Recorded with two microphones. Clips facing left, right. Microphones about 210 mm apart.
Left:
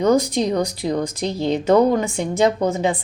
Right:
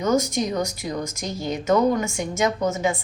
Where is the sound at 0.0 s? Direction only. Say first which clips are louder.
Left 5 dB; 35° left (ahead or behind).